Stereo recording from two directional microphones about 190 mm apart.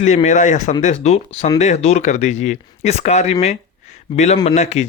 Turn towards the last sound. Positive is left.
turn(degrees=35)  # may be behind; listen again after turning